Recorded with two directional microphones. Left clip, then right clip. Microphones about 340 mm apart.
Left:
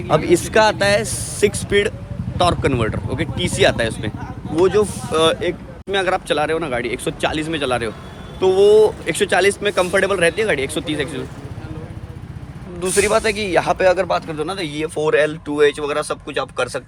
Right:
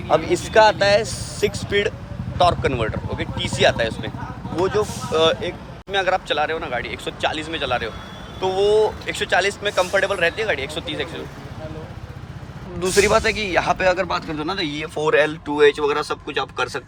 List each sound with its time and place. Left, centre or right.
0.1 s speech: left
12.8 s speech: centre